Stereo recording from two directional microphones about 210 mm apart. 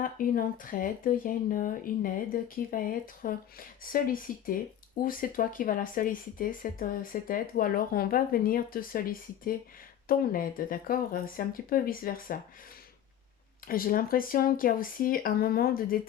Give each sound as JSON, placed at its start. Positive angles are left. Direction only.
{"t": 0.0, "sound": "speech", "side_deg": 40}
{"t": 13.7, "sound": "speech", "side_deg": 45}